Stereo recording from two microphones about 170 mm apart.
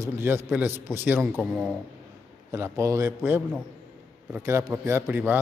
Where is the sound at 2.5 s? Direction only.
15° right (ahead or behind).